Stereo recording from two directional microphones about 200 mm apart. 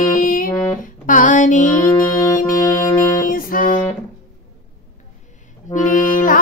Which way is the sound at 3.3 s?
45° left (ahead or behind).